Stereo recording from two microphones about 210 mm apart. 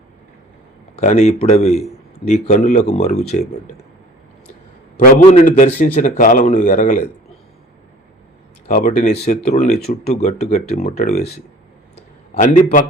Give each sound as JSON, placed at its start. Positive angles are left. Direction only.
{"t": 0.9, "sound": "a man's voice", "side_deg": 35}
{"t": 4.9, "sound": "a man's voice", "side_deg": 40}
{"t": 8.6, "sound": "a man's voice", "side_deg": 35}
{"t": 12.4, "sound": "a man's voice", "side_deg": 35}